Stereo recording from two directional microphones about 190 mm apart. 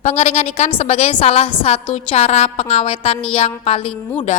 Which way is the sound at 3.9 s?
5° left (ahead or behind).